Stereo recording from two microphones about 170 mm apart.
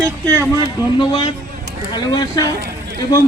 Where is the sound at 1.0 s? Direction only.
30° left (ahead or behind).